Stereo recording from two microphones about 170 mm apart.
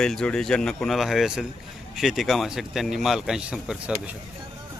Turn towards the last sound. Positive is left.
turn(degrees=-5)  # may be behind; listen again after turning